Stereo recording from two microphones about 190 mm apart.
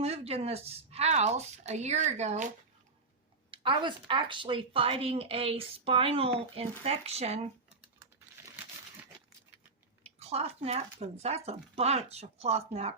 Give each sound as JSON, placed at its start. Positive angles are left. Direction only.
{"t": 0.0, "sound": "a woman's voice", "side_deg": -30}
{"t": 3.5, "sound": "a woman's voice", "side_deg": -25}
{"t": 10.0, "sound": "a woman's voice", "side_deg": -35}